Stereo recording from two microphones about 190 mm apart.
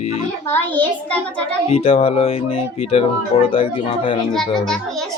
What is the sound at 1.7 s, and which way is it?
Speech, 30° left (ahead or behind).